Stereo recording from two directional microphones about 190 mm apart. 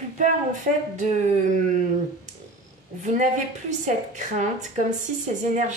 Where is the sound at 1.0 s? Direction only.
40° right (ahead or behind).